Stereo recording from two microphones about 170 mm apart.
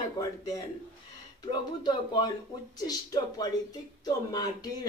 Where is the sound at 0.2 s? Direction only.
20° left (ahead or behind).